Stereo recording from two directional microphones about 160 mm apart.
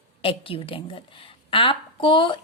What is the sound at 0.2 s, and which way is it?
A woman's voice, 35° left (ahead or behind).